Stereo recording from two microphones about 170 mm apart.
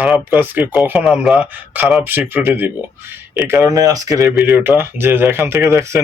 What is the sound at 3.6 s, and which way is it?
Speech, 20° right (ahead or behind).